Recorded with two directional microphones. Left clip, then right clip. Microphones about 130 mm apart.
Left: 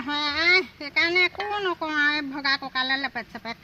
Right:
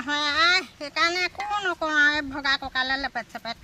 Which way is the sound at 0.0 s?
20° right (ahead or behind).